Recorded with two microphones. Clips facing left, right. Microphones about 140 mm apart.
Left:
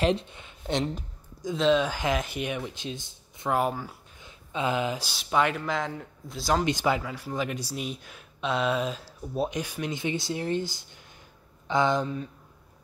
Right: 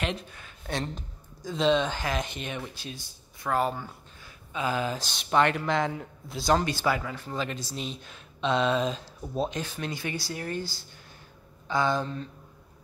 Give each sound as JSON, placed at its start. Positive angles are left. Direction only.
{"t": 0.0, "sound": "speech", "side_deg": 30}
{"t": 0.9, "sound": "a sound", "side_deg": 10}
{"t": 1.6, "sound": "speech", "side_deg": 5}
{"t": 4.2, "sound": "a man's voice", "side_deg": 25}
{"t": 6.6, "sound": "speech", "side_deg": 20}
{"t": 7.0, "sound": "speech", "side_deg": 10}